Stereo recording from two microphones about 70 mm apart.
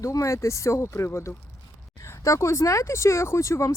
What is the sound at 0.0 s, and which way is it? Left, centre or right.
Speech, left.